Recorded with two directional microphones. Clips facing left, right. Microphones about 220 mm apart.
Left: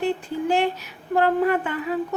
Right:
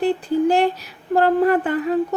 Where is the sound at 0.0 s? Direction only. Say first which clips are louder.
Right 6 dB; 40° right (ahead or behind).